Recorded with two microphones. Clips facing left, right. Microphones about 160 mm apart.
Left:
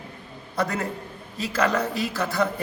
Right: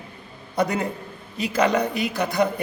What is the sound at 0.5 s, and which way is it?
A man's voice, 20° right (ahead or behind).